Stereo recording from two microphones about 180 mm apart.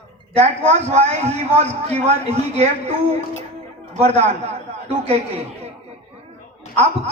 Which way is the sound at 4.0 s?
35° right (ahead or behind).